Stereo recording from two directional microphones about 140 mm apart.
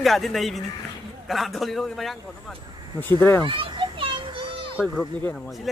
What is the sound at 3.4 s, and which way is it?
Children playing, 35° right (ahead or behind).